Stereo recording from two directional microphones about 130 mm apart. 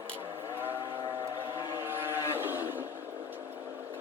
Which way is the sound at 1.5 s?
15° right (ahead or behind).